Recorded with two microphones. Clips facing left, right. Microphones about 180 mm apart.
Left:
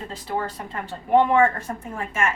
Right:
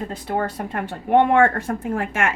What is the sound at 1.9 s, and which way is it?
Speech, 60° right (ahead or behind).